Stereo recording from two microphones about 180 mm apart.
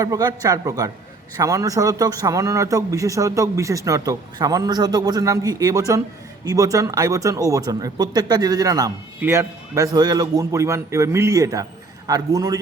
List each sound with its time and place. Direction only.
0.0 s speech: 20° right (ahead or behind)